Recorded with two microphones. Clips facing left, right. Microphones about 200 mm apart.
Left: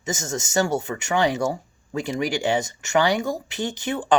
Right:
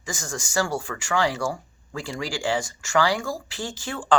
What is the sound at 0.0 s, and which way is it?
Speech, 20° left (ahead or behind).